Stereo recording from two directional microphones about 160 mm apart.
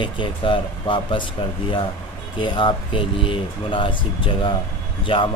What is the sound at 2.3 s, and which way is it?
Speech, 30° left (ahead or behind).